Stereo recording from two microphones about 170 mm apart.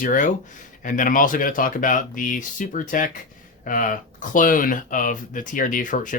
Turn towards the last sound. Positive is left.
turn(degrees=50)  # may be behind; listen again after turning